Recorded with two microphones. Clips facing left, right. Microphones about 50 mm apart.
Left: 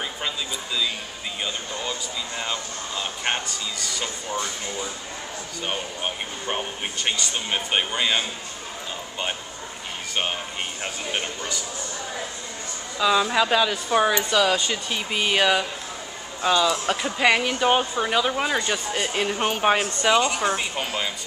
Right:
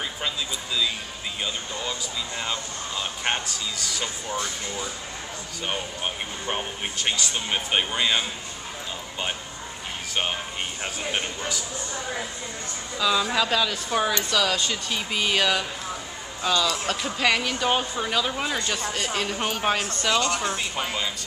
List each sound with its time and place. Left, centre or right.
1.4 s speech: centre
10.8 s speech: centre
13.0 s speech: centre